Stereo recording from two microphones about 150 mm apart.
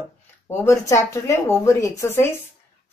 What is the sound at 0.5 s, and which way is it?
Speech, 15° left (ahead or behind).